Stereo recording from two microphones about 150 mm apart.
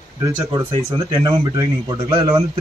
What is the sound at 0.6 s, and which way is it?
A man's voice, 25° right (ahead or behind).